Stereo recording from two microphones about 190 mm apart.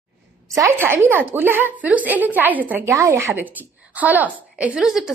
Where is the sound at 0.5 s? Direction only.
15° right (ahead or behind).